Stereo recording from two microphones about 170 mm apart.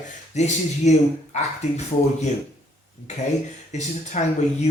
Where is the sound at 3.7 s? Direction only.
40° left (ahead or behind).